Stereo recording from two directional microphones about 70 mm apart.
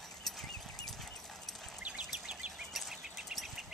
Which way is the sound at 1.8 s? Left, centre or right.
Centre.